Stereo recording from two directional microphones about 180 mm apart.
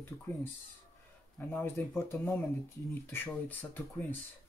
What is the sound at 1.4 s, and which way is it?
Speech, 10° left (ahead or behind).